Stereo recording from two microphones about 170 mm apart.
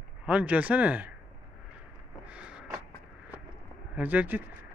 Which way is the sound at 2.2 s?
5° right (ahead or behind).